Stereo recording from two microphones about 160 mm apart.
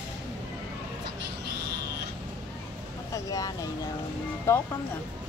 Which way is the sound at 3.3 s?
20° left (ahead or behind).